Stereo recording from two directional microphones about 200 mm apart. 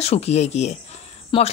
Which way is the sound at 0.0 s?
30° left (ahead or behind).